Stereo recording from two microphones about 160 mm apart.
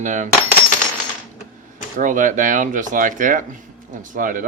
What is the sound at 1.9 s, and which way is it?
Speech, 55° right (ahead or behind).